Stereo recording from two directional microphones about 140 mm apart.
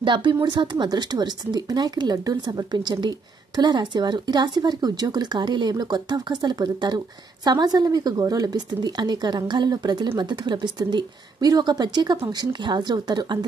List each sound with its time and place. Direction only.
0.0 s speech: 35° right (ahead or behind)